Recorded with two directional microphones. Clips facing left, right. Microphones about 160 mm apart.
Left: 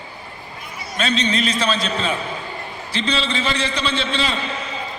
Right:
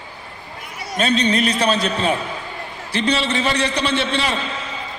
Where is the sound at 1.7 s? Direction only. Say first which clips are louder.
Right 3 dB; 55° right (ahead or behind).